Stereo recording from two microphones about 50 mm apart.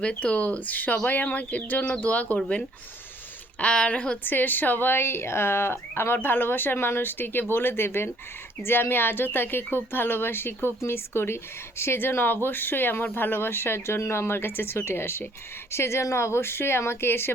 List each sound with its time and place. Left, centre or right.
0.0 s speech: left
3.6 s speech: left
4.2 s speech: left
15.7 s speech: left